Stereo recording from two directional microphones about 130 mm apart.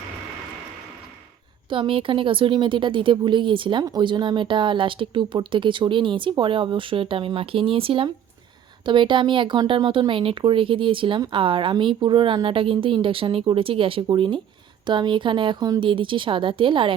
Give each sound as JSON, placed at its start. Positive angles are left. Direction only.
{"t": 1.7, "sound": "speech", "side_deg": -40}